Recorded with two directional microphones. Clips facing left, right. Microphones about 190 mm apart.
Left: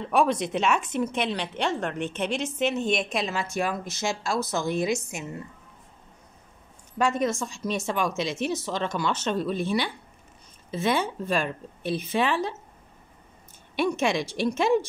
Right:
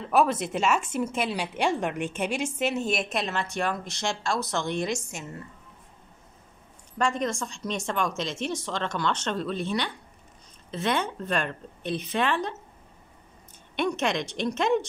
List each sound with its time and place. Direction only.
0.0 s a woman's voice: 5° right (ahead or behind)
7.0 s a woman's voice: 5° left (ahead or behind)
13.7 s a woman's voice: 5° left (ahead or behind)